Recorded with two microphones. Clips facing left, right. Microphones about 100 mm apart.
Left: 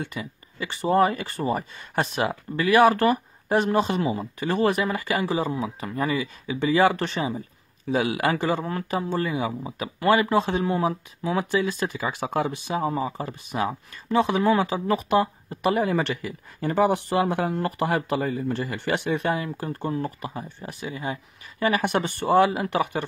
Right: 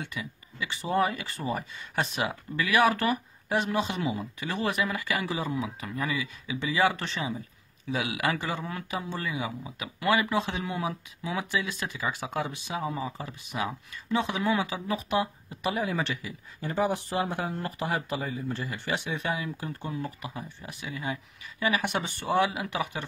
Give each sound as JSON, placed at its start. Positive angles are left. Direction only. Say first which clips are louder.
{"t": 0.0, "sound": "speech", "louder": "left 4 dB", "side_deg": 40}
{"t": 12.0, "sound": "speech", "louder": "left 4 dB", "side_deg": 55}
{"t": 21.5, "sound": "speech", "louder": "left 5 dB", "side_deg": 45}